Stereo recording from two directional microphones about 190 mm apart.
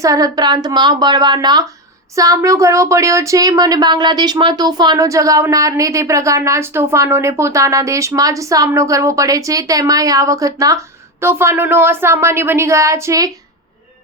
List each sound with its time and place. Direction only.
0.0 s speech: 15° right (ahead or behind)